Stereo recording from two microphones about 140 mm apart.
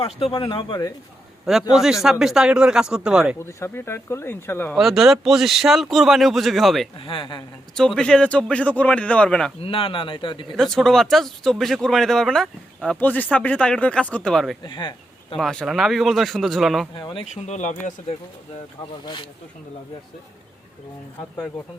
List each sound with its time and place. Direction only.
0.0 s speech: 40° left (ahead or behind)
1.7 s speech: 5° right (ahead or behind)
3.3 s a man's voice: 15° left (ahead or behind)
4.8 s speech: centre (ahead or behind)
6.9 s speech: 40° left (ahead or behind)
7.8 s a man's voice: 5° left (ahead or behind)
9.6 s speech: 40° left (ahead or behind)
10.6 s speech: 5° left (ahead or behind)
14.6 s speech: 35° left (ahead or behind)
15.4 s speech: centre (ahead or behind)
17.0 s speech: 35° left (ahead or behind)
17.2 s speech: 55° left (ahead or behind)